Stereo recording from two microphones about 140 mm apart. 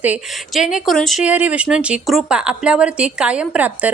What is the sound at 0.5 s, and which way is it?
A woman's voice, centre (ahead or behind).